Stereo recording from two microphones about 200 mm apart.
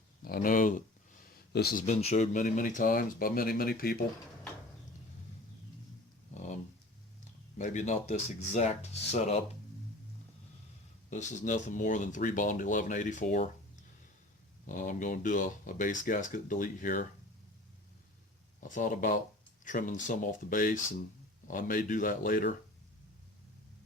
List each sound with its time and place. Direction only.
0.2 s speech: 45° left (ahead or behind)
1.2 s a sound: 50° left (ahead or behind)
1.8 s speech: 35° left (ahead or behind)
6.3 s a sound: 35° left (ahead or behind)
7.6 s speech: 35° left (ahead or behind)
11.1 s speech: 40° left (ahead or behind)
14.7 s speech: 40° left (ahead or behind)
18.6 s speech: 40° left (ahead or behind)